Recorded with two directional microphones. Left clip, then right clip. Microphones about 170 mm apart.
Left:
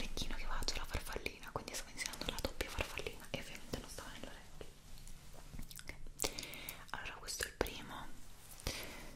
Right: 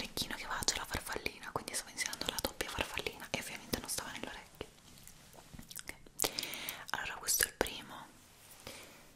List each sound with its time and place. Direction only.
0.0 s whispering: 15° right (ahead or behind); by 4.3 s 35° right (ahead or behind)
4.6 s whispering: 55° right (ahead or behind)
5.7 s whispering: 10° right (ahead or behind)
7.6 s whispering: 5° right (ahead or behind)
8.7 s a sound: 35° left (ahead or behind)